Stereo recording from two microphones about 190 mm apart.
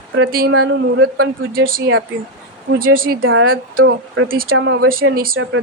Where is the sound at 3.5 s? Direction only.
50° right (ahead or behind).